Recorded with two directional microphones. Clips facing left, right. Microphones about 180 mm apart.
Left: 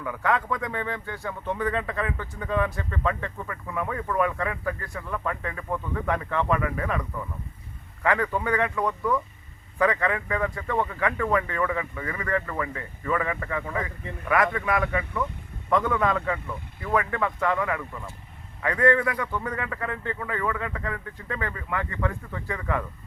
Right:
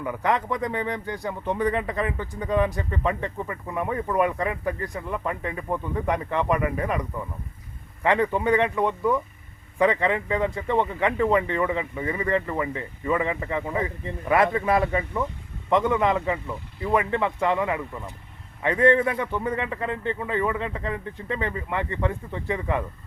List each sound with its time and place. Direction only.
0.0 s speech: 20° right (ahead or behind)
8.0 s speech: 25° right (ahead or behind)